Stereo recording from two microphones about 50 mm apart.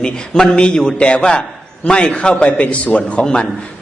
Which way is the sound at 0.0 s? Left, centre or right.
Centre.